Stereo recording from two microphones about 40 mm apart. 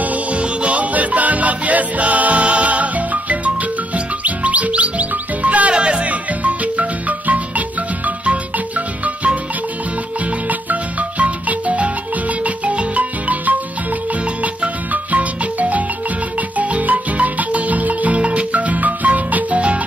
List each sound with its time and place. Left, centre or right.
0.0 s music: right
5.8 s music: right
10.5 s music: right